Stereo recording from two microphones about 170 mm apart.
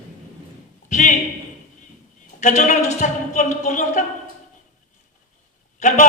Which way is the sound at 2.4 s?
45° left (ahead or behind).